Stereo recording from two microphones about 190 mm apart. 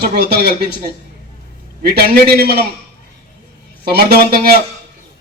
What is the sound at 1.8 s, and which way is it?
Speech, 55° right (ahead or behind).